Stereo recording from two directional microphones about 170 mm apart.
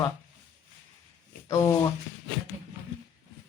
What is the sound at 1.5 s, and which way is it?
Speech, 15° left (ahead or behind).